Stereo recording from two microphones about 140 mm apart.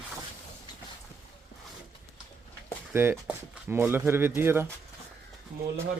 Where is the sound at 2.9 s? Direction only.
15° right (ahead or behind).